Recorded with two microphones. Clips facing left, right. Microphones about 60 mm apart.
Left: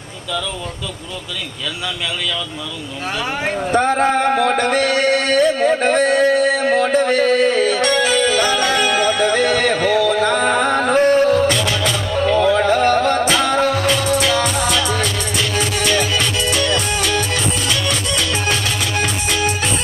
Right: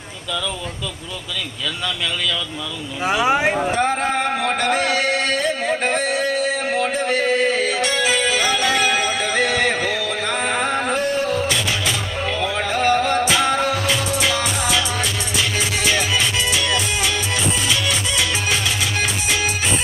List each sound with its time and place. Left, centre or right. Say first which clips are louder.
3.1 s speech: right 5 dB; centre
3.8 s speech: left 4 dB; left
4.9 s a sound: left 5 dB; left
8.3 s music: left 3 dB; left
13.3 s music: left 1 dB; centre
13.6 s music: left 4 dB; left